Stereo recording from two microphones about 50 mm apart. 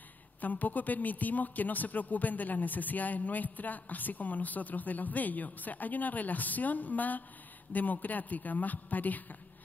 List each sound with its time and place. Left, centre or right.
0.4 s speech: left